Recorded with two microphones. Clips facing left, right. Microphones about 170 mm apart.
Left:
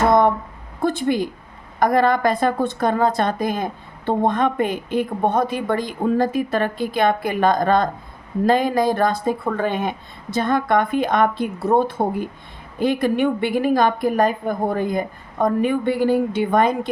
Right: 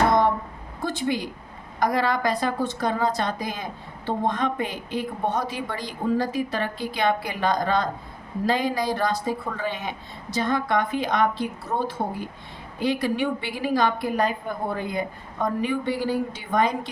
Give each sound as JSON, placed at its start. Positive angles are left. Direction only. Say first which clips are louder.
{"t": 0.8, "sound": "a woman's voice", "louder": "left 6 dB", "side_deg": 55}